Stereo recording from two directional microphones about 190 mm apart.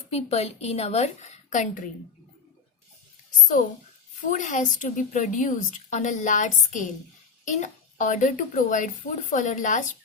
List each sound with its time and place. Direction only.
0.1 s a woman's voice: 35° left (ahead or behind)
4.3 s a woman's voice: 40° left (ahead or behind)